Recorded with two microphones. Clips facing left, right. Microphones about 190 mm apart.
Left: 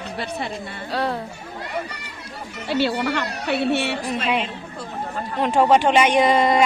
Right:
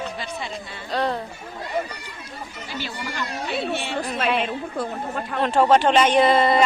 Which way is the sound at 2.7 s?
70° left (ahead or behind).